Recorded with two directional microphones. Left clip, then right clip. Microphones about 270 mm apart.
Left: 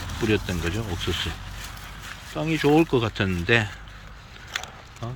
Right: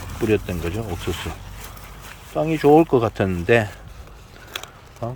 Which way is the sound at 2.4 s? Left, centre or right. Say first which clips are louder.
Right 6 dB; centre.